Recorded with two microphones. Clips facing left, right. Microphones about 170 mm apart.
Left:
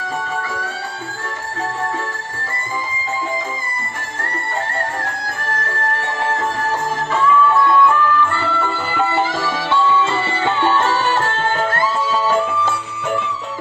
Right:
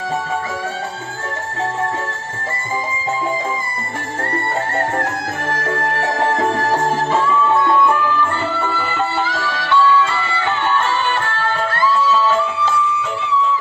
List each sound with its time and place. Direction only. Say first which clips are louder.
6.0 s music: right 5 dB; 45° right (ahead or behind)
6.7 s music: right 4 dB; 30° right (ahead or behind); by 8.7 s 15° right (ahead or behind)
9.1 s music: left 2 dB; 20° left (ahead or behind)
10.8 s music: left 2 dB; 40° left (ahead or behind)